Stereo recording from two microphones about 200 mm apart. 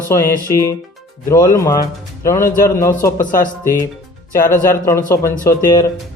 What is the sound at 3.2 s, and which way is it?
Speech, 45° left (ahead or behind).